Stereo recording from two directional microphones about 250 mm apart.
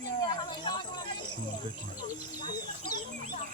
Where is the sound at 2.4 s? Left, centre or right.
Centre.